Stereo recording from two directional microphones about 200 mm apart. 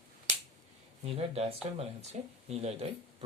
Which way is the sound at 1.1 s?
30° right (ahead or behind).